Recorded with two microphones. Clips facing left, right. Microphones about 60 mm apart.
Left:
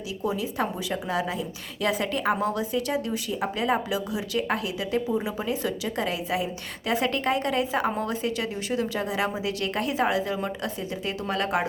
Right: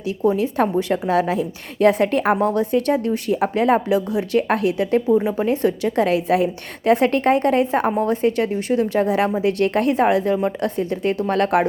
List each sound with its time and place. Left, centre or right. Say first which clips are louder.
0.3 s a woman's voice: right 9 dB; right
7.9 s a woman's voice: right 8 dB; right
8.1 s a woman's voice: right 9 dB; right